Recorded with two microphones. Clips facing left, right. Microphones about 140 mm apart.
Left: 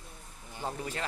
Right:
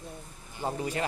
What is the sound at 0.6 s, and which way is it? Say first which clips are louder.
Speech: right 5 dB; 15° right (ahead or behind).